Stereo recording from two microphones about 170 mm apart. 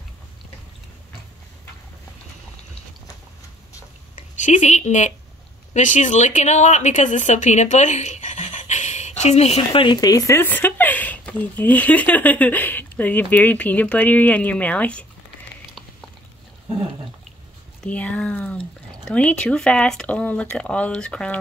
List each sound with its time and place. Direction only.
4.1 s a woman's voice: 45° left (ahead or behind); by 15.0 s 10° left (ahead or behind)
17.8 s speech: 10° left (ahead or behind)